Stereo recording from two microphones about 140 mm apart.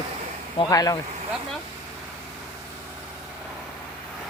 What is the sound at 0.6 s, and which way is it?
Speech, 25° left (ahead or behind).